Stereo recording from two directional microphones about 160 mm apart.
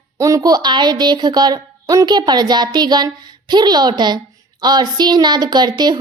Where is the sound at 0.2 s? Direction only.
20° right (ahead or behind).